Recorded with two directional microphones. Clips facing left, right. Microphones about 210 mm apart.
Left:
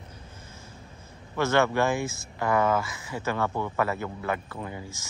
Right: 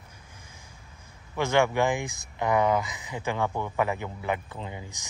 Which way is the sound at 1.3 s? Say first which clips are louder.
Even; 15° right (ahead or behind).